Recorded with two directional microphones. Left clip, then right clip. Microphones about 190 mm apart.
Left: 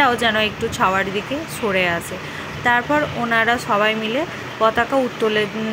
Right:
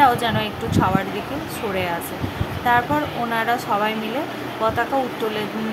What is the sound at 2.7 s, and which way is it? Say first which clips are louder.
Speech: left 2 dB; 10° left (ahead or behind).